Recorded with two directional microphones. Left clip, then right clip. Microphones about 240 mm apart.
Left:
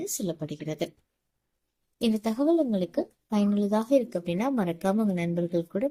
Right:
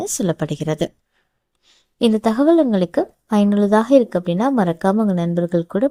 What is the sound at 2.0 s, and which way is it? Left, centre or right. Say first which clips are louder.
A woman's voice: right 11 dB; right.